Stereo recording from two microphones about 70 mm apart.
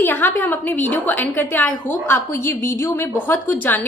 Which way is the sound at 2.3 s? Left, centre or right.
Left.